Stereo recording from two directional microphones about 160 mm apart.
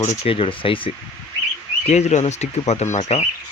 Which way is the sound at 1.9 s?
45° left (ahead or behind).